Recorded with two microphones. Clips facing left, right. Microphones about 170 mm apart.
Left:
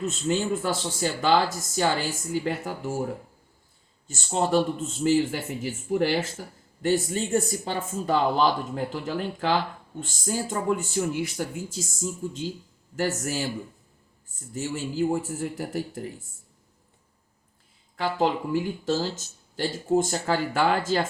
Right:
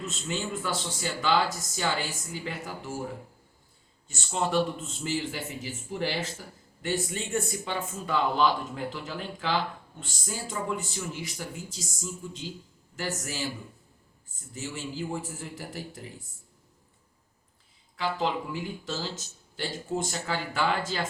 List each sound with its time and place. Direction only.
0.0 s speech: 45° left (ahead or behind)
4.1 s speech: 40° left (ahead or behind)
14.5 s speech: 45° left (ahead or behind)
17.9 s speech: 45° left (ahead or behind)